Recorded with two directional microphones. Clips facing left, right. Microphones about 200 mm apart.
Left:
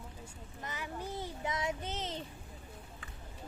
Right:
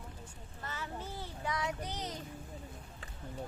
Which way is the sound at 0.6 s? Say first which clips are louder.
Left 1 dB; 15° left (ahead or behind).